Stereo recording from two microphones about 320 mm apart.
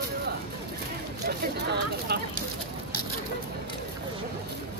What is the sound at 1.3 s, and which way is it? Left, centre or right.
Speech, right.